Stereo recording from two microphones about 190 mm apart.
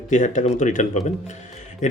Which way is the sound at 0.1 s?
40° left (ahead or behind).